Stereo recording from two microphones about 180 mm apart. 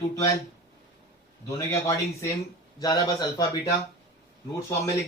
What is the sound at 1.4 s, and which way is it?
A man's voice, 15° left (ahead or behind).